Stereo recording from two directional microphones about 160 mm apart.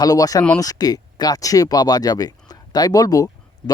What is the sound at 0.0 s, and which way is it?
Speech, 25° left (ahead or behind).